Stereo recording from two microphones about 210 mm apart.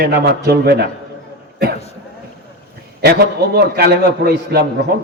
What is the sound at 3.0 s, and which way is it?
A man's voice, 50° right (ahead or behind).